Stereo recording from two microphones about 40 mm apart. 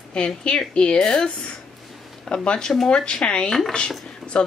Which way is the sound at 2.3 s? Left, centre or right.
Left.